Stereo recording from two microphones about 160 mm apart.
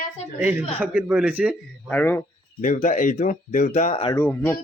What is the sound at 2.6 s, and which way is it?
Speech, 55° left (ahead or behind).